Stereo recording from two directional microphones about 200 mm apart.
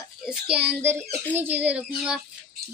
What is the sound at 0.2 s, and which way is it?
A child's voice, 5° right (ahead or behind).